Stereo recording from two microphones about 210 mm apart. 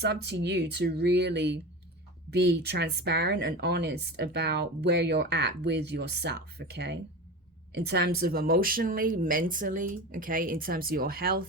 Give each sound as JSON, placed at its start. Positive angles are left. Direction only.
{"t": 0.0, "sound": "speech", "side_deg": -50}